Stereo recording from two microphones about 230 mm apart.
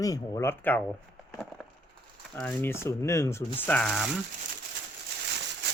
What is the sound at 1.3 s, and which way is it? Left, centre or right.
Wood, centre.